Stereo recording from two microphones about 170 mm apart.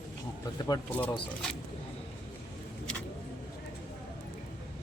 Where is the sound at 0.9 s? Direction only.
10° left (ahead or behind).